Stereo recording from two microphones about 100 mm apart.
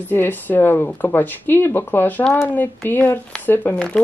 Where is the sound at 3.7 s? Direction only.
5° left (ahead or behind).